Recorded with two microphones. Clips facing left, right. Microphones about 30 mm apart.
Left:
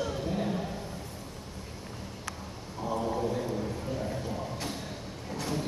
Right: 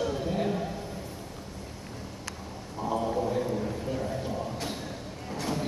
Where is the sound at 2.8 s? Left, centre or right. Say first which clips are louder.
Right 2 dB; centre.